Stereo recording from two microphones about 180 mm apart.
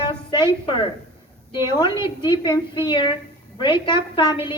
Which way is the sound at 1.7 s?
25° left (ahead or behind).